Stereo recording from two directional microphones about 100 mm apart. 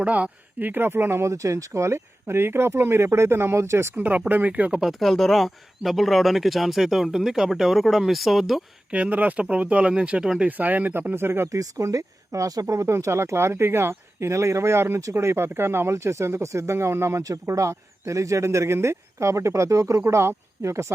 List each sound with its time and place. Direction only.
0.0 s speech: 15° right (ahead or behind)
3.9 s speech: 15° right (ahead or behind)
4.8 s speech: centre (ahead or behind)
8.9 s speech: 15° right (ahead or behind)
11.6 s speech: 35° right (ahead or behind)